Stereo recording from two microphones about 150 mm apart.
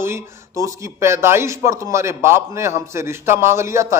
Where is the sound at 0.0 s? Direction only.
20° right (ahead or behind).